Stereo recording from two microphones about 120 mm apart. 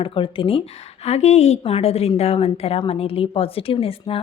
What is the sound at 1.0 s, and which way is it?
A woman's voice, 65° left (ahead or behind).